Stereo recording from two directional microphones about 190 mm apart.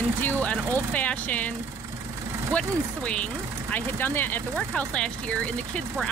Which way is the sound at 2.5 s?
5° left (ahead or behind).